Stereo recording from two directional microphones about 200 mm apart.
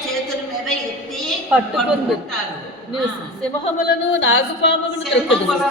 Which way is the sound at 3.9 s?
65° left (ahead or behind).